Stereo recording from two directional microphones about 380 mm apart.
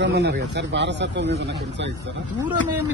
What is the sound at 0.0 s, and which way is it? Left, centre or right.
Speech, right.